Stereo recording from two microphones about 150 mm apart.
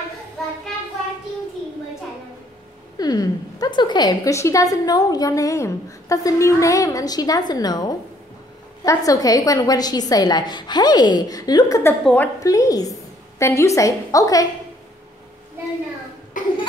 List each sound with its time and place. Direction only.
3.0 s a woman's voice: 25° left (ahead or behind)
12.0 s a woman's voice: 10° left (ahead or behind)
12.4 s a woman's voice: 25° left (ahead or behind)
16.3 s cough: 60° left (ahead or behind)